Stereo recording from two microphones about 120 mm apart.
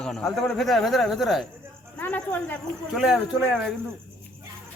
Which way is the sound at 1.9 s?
15° left (ahead or behind).